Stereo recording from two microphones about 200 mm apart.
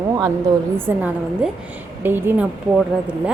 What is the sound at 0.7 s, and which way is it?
A woman's voice, 10° right (ahead or behind).